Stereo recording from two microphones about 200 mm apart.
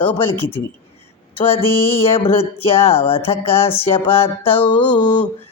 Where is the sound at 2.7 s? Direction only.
30° left (ahead or behind).